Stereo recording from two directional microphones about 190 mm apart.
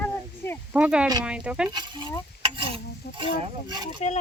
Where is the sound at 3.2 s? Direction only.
25° right (ahead or behind).